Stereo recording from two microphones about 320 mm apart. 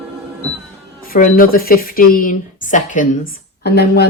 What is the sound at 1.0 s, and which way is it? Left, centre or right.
Speech, left.